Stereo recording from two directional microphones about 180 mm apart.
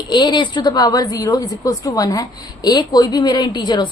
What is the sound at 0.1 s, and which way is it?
A woman's voice, 25° left (ahead or behind).